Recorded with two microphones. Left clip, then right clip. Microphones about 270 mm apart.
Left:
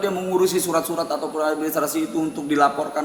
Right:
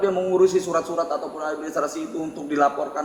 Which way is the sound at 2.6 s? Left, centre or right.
Left.